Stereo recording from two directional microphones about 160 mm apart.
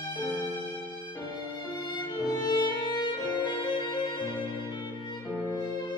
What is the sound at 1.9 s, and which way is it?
Music, 30° left (ahead or behind).